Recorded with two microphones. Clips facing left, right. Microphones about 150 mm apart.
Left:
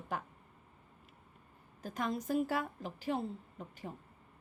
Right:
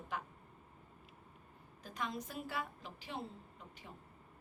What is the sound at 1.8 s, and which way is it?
A woman's voice, 45° left (ahead or behind).